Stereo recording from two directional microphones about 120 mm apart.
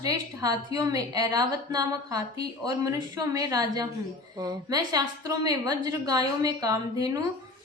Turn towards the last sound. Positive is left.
turn(degrees=-30)  # may be behind; listen again after turning